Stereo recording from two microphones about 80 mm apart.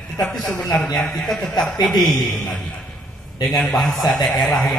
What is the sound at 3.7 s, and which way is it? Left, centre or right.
Speech, centre.